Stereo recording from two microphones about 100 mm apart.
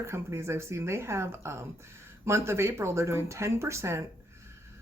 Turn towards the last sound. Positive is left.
turn(degrees=-25)  # may be behind; listen again after turning